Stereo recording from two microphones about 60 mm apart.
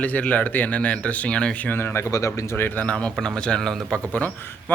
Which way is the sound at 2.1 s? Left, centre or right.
Left.